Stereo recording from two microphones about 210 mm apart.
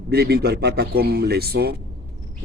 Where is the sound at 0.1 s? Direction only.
50° right (ahead or behind).